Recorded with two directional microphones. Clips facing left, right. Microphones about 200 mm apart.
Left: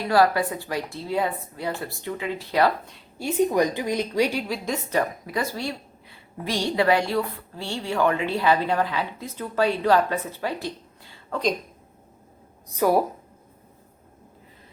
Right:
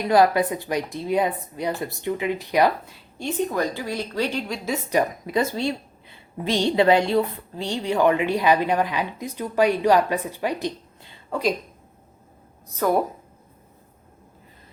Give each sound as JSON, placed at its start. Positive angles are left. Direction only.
{"t": 0.0, "sound": "a woman's voice", "side_deg": -20}
{"t": 3.2, "sound": "a woman's voice", "side_deg": 10}
{"t": 4.9, "sound": "a woman's voice", "side_deg": -20}
{"t": 12.7, "sound": "a woman's voice", "side_deg": 5}